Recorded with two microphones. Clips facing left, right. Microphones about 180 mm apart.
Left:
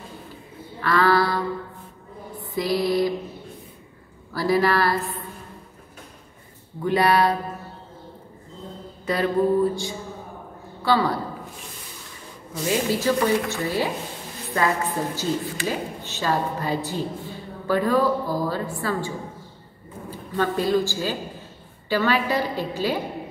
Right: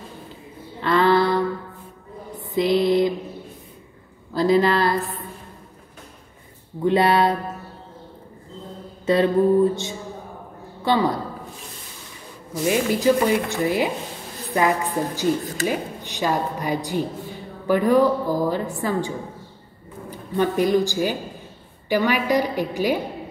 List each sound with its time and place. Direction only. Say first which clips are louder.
0.7 s a sound: right 2 dB; 20° right (ahead or behind)
2.4 s mantra: right 4 dB; 20° right (ahead or behind)
4.3 s a woman's voice: right 3 dB; 20° right (ahead or behind)
6.8 s mantra: right 2 dB; 25° right (ahead or behind)
9.0 s mantra: right 4 dB; 25° right (ahead or behind)
10.8 s a man's voice: right 1 dB; 20° right (ahead or behind)
12.6 s a woman's voice: right 3 dB; 15° right (ahead or behind)